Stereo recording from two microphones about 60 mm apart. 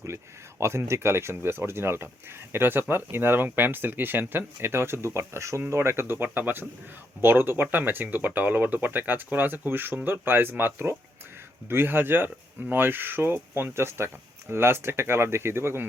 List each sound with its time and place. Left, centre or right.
0.6 s speech: right